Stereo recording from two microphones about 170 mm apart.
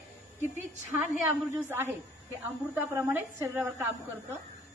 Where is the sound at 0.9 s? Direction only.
10° right (ahead or behind).